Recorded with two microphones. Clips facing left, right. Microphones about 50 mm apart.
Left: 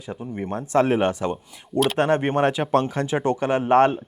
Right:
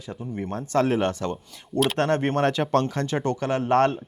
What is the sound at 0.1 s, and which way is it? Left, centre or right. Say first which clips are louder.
Speech: left 2 dB; centre.